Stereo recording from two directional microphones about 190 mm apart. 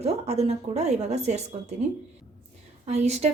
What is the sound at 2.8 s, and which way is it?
Speech, 35° right (ahead or behind).